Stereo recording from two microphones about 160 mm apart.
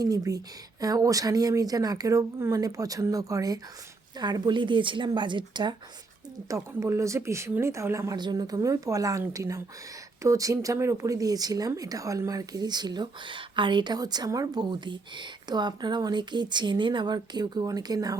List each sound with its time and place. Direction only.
0.0 s speech: 20° right (ahead or behind)
6.5 s speech: 20° right (ahead or behind)